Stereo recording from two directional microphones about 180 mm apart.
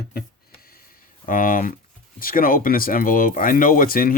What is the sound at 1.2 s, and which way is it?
Speech, 50° left (ahead or behind).